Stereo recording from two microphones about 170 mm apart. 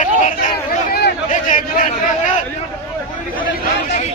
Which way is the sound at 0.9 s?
70° left (ahead or behind).